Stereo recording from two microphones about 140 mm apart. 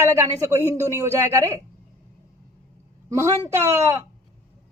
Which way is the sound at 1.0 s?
20° right (ahead or behind).